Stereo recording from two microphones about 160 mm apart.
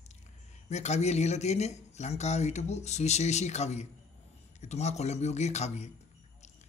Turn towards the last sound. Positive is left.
turn(degrees=45)  # may be behind; listen again after turning